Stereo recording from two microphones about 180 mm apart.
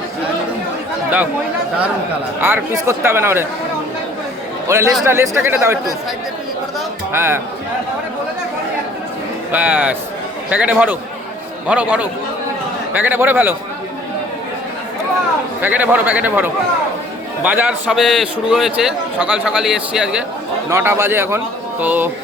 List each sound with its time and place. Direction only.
2.4 s a man's voice: 10° right (ahead or behind)
4.7 s a man's voice: 15° right (ahead or behind)
7.1 s a man's voice: 15° right (ahead or behind)
9.5 s a man's voice: 10° right (ahead or behind)
15.6 s a man's voice: 10° right (ahead or behind)